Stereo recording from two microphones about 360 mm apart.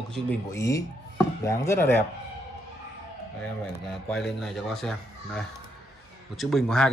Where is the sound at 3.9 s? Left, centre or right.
Centre.